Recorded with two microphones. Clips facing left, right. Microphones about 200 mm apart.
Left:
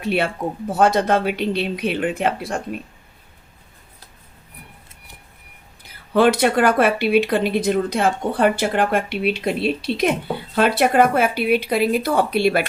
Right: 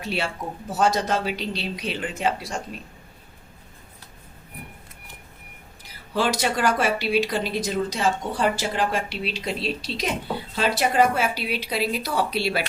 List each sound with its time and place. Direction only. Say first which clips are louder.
0.0 s speech: left 7 dB; 55° left (ahead or behind)
6.1 s speech: left 8 dB; 55° left (ahead or behind)